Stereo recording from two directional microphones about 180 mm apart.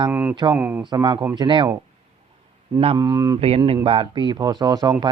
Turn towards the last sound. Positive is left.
turn(degrees=-20)  # may be behind; listen again after turning